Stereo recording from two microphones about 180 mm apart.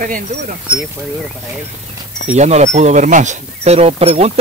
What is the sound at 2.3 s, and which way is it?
Speech, 40° right (ahead or behind).